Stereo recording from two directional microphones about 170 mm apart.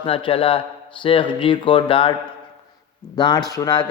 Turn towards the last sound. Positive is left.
turn(degrees=25)  # may be behind; listen again after turning